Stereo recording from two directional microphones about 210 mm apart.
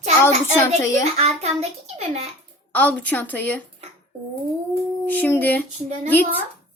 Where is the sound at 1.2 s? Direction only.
30° right (ahead or behind).